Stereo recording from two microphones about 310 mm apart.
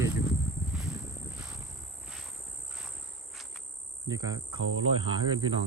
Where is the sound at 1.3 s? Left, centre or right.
Centre.